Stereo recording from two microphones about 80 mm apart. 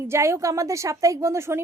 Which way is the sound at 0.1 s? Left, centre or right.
Right.